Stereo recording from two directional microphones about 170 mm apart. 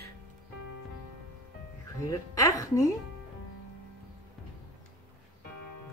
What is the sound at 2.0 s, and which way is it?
Speech, 20° left (ahead or behind).